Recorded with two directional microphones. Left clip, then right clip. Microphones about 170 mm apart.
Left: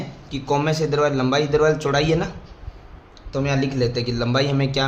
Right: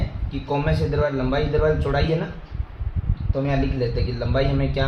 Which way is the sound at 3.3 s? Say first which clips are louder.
Left 2 dB; 50° left (ahead or behind).